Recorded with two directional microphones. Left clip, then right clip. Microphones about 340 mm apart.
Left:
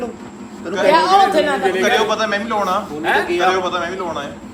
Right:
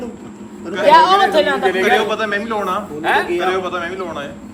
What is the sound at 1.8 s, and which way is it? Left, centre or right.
A man's voice, centre.